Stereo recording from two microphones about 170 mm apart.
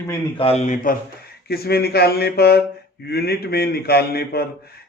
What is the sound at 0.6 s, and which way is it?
Speech, 50° left (ahead or behind).